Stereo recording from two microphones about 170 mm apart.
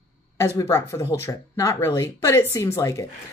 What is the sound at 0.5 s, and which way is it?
A woman's voice, 20° left (ahead or behind).